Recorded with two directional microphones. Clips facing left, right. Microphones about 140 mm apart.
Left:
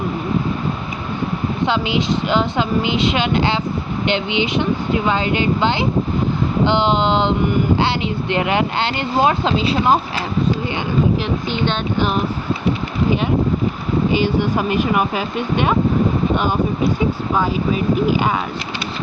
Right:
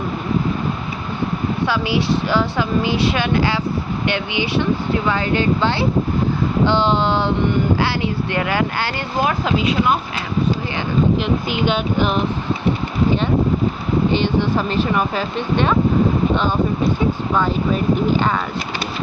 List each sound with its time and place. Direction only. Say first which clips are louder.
1.6 s speech: left 1 dB; 20° left (ahead or behind)
11.4 s speech: right 1 dB; 5° right (ahead or behind)
14.1 s speech: left 2 dB; 10° left (ahead or behind)